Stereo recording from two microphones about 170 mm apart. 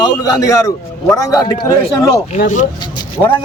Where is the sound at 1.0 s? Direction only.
20° left (ahead or behind).